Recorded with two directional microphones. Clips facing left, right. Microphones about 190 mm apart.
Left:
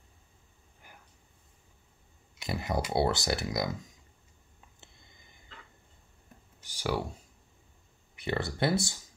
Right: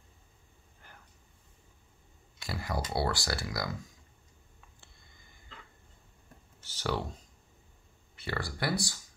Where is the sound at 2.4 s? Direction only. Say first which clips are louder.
Left 4 dB; 20° left (ahead or behind).